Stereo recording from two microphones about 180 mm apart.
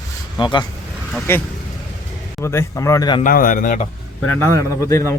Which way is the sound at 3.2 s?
50° left (ahead or behind).